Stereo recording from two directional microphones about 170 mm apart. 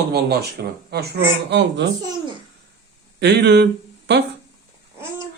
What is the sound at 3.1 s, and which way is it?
Speech, 80° right.